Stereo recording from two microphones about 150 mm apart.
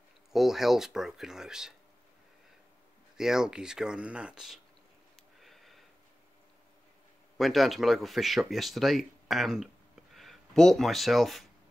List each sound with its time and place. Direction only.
0.3 s speech: centre (ahead or behind)
3.2 s speech: 5° right (ahead or behind)
5.4 s sniff: centre (ahead or behind)
7.3 s speech: centre (ahead or behind)